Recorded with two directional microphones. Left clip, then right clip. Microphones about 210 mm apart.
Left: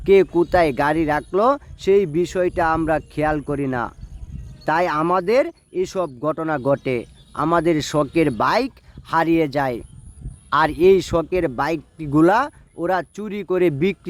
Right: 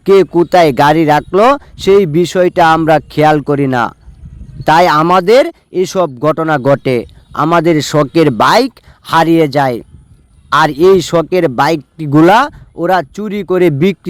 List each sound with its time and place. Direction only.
0.0 s speech: 30° right (ahead or behind)